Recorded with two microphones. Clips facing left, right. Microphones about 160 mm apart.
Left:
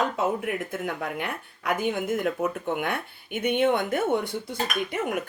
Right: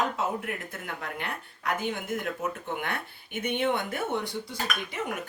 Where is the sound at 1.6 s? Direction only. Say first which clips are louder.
Left 5 dB; 50° left (ahead or behind).